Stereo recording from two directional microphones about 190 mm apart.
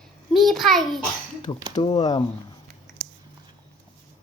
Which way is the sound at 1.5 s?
25° left (ahead or behind).